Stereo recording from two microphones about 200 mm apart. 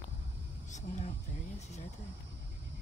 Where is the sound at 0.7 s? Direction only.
35° left (ahead or behind).